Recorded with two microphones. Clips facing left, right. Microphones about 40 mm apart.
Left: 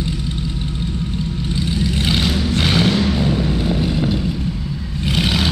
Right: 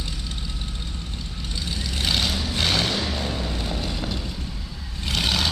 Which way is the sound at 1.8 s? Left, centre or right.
Centre.